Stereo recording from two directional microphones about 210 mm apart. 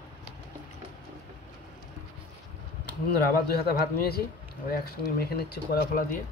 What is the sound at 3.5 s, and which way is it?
Speech, 50° left (ahead or behind).